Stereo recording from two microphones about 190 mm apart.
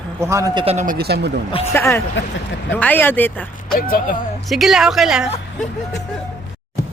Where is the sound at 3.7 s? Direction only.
50° left (ahead or behind).